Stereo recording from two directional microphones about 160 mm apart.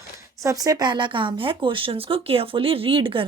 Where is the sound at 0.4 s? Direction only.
25° right (ahead or behind).